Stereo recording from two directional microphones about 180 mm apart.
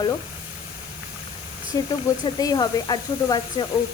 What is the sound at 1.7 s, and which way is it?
A woman's voice, 25° left (ahead or behind).